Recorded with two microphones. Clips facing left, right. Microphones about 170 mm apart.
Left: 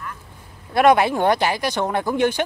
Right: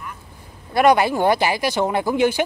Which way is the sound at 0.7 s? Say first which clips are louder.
Even; centre (ahead or behind).